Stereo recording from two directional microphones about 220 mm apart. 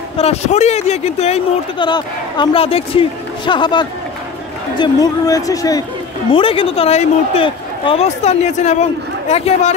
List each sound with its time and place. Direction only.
0.2 s speech: 30° left (ahead or behind)